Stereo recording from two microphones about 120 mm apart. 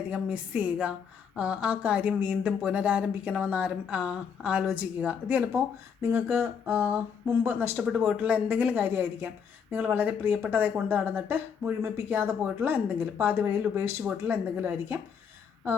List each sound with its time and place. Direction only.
0.1 s speech: 10° right (ahead or behind)
6.0 s speech: 20° right (ahead or behind)